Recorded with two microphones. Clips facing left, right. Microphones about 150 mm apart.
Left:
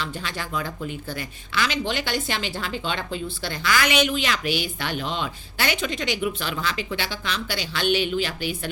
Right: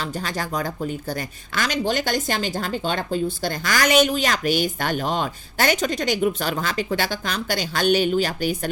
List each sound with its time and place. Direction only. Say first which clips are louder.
0.0 s a woman's voice: right 4 dB; 40° right (ahead or behind)